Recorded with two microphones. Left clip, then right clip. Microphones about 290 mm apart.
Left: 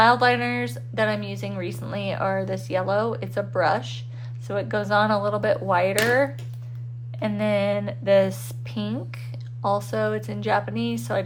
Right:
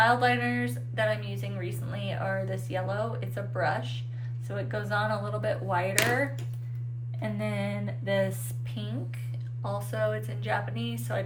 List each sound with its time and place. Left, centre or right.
0.0 s speech: centre
7.2 s speech: left